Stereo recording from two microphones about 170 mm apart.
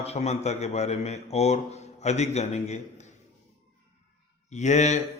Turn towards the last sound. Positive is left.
turn(degrees=45)  # may be behind; listen again after turning